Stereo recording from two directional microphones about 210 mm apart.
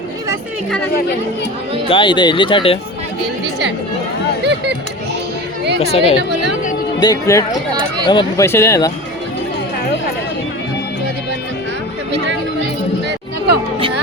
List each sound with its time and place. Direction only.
1.9 s speech: 25° left (ahead or behind)
4.4 s speech: 55° right (ahead or behind)
5.8 s speech: 30° left (ahead or behind)
6.1 s a woman's voice: 55° right (ahead or behind)
7.0 s speech: 15° left (ahead or behind)
7.7 s speech: 20° right (ahead or behind)
8.0 s speech: 20° left (ahead or behind)